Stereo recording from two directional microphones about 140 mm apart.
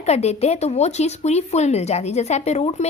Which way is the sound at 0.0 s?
50° left (ahead or behind).